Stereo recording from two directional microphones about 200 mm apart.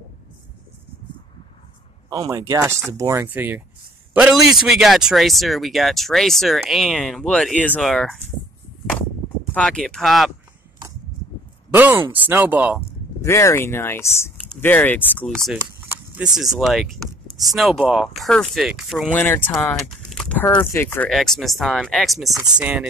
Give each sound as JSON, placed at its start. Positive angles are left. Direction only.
{"t": 2.0, "sound": "speech", "side_deg": -15}
{"t": 9.5, "sound": "speech", "side_deg": 5}
{"t": 11.7, "sound": "speech", "side_deg": -10}
{"t": 13.2, "sound": "speech", "side_deg": 15}
{"t": 16.3, "sound": "speech", "side_deg": 0}
{"t": 19.2, "sound": "speech", "side_deg": 10}